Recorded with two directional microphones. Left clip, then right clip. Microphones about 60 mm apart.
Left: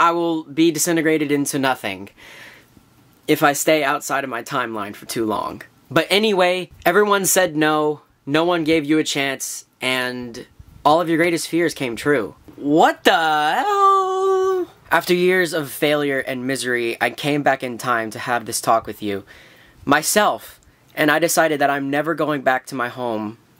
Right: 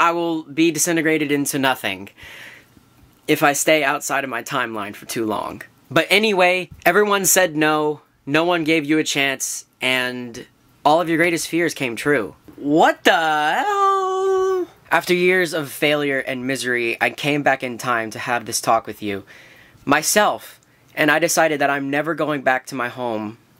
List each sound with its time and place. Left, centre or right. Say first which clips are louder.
0.0 s speech: left 1 dB; centre
12.6 s speech: even; centre